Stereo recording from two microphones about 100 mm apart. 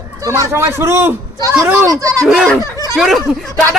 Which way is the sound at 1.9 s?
35° right (ahead or behind).